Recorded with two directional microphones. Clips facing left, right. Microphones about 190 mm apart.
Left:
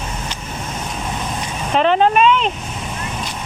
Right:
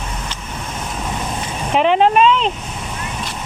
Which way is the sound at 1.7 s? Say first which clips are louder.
Right 1 dB; 15° right (ahead or behind).